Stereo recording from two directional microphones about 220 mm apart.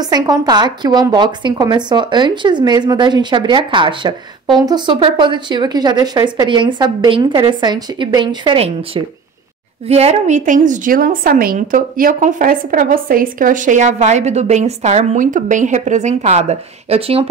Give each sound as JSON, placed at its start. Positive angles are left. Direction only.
{"t": 0.0, "sound": "a woman's voice", "side_deg": -15}